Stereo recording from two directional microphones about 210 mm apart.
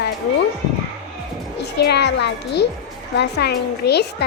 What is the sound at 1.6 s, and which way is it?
A woman's voice, 55° left (ahead or behind).